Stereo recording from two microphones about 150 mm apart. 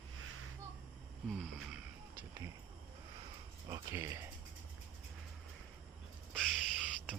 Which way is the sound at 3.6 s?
20° right (ahead or behind).